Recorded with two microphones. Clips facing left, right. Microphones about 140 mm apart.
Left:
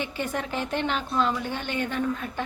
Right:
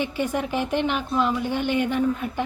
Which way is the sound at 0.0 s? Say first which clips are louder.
Right 5 dB; 10° right (ahead or behind).